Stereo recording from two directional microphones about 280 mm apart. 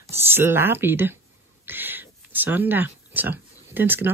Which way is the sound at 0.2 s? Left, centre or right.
Centre.